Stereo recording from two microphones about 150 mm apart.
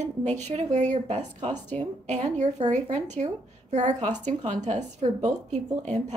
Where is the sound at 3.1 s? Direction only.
50° right (ahead or behind).